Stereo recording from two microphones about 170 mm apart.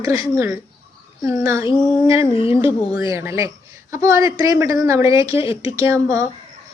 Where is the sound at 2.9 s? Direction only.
20° right (ahead or behind).